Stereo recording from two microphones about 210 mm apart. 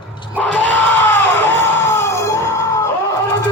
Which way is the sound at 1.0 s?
10° left (ahead or behind).